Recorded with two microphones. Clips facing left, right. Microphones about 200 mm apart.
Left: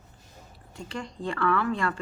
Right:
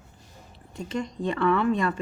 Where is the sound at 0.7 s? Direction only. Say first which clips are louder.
Right 6 dB; 20° right (ahead or behind).